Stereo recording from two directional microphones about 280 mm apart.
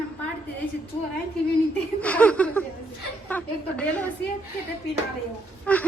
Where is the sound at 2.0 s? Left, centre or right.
Centre.